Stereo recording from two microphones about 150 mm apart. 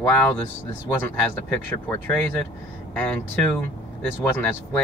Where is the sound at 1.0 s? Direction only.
15° left (ahead or behind).